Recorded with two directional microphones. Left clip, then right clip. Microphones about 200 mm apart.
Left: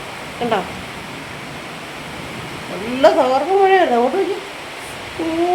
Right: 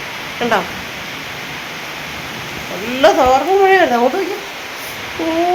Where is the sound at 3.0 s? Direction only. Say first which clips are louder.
Right 2 dB; 15° right (ahead or behind).